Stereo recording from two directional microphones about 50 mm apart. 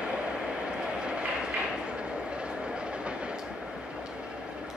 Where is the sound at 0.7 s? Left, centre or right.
Centre.